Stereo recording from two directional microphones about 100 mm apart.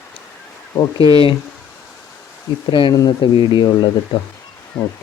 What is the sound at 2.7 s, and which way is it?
Speech, 55° left (ahead or behind).